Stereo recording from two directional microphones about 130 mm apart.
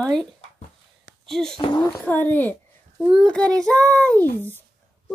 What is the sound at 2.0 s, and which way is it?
Speech, 15° left (ahead or behind).